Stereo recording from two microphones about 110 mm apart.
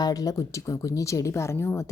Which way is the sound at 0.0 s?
35° left (ahead or behind).